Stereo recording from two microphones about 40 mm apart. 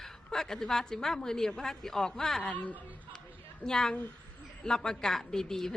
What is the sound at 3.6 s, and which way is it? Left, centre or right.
Speech, centre.